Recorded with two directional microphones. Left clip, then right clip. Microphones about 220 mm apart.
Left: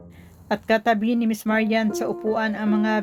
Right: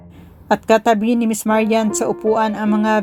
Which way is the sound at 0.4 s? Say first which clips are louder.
Right 7 dB; 10° right (ahead or behind).